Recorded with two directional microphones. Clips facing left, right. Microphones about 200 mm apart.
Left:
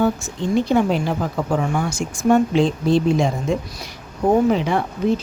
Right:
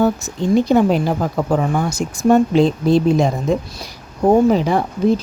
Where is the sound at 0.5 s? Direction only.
40° right (ahead or behind).